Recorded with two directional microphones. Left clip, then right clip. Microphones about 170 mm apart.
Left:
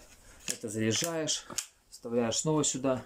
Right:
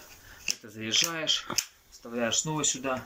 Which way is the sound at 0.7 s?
40° left (ahead or behind).